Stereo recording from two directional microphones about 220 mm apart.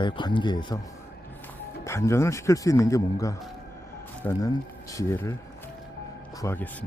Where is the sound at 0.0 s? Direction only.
20° left (ahead or behind).